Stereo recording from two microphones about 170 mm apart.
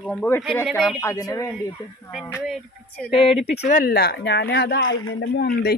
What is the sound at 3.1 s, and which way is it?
Speech, 30° left (ahead or behind).